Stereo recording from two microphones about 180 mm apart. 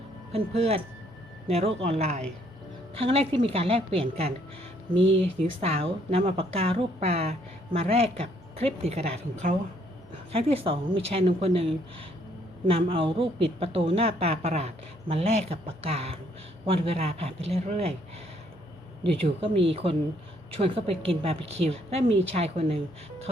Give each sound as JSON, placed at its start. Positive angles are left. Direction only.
{"t": 0.3, "sound": "a woman's voice", "side_deg": -35}
{"t": 19.0, "sound": "a woman's voice", "side_deg": -30}